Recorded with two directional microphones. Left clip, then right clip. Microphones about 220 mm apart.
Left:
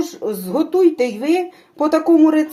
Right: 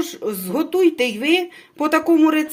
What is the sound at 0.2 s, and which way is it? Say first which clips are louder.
Speech: left 2 dB; 40° right (ahead or behind).